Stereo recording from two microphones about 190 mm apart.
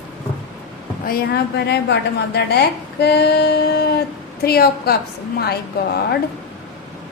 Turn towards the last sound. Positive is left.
turn(degrees=55)  # may be behind; listen again after turning